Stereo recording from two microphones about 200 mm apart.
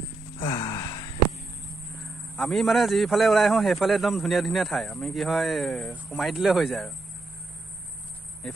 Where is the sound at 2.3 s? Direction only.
Centre (ahead or behind).